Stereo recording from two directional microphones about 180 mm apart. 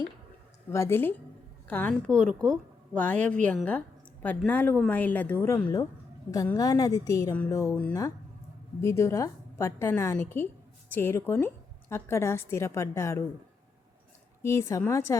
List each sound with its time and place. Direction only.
0.7 s a woman's voice: 15° left (ahead or behind)
14.4 s a woman's voice: 15° left (ahead or behind)